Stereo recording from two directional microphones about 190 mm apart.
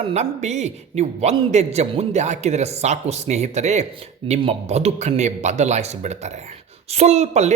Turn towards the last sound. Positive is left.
turn(degrees=-35)  # may be behind; listen again after turning